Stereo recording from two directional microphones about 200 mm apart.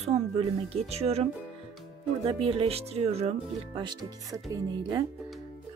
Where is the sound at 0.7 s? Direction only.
30° right (ahead or behind).